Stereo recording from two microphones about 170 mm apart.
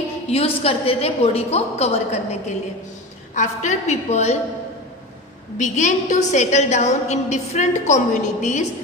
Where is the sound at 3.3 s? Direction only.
45° left (ahead or behind).